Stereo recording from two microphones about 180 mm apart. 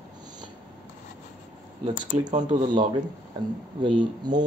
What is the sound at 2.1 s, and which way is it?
Speech, 40° right (ahead or behind).